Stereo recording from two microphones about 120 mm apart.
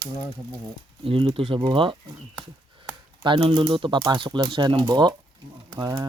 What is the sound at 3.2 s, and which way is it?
Speech, 45° right (ahead or behind).